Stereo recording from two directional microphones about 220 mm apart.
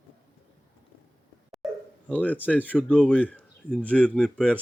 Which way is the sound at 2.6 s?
5° right (ahead or behind).